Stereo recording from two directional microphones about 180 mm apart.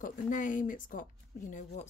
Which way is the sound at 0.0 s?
45° left (ahead or behind).